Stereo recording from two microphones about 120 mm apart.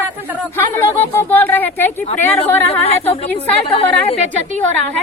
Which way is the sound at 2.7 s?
55° left (ahead or behind).